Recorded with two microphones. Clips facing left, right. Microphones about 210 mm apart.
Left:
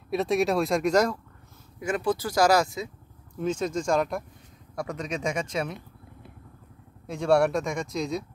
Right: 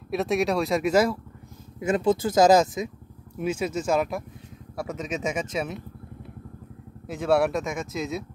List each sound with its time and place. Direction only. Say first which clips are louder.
0.1 s speech: even; centre (ahead or behind)
1.8 s speech: right 4 dB; 25° right (ahead or behind)
3.3 s speech: even; 10° right (ahead or behind)
7.1 s speech: even; 5° right (ahead or behind)